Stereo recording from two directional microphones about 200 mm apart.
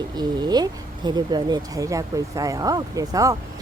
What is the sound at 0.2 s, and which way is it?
Speech, 20° right (ahead or behind).